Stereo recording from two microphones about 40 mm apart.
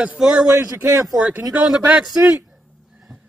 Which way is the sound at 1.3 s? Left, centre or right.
Right.